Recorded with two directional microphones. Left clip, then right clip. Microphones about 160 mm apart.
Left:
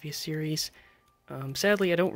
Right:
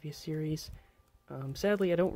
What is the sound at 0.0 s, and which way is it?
Speech, 5° right (ahead or behind).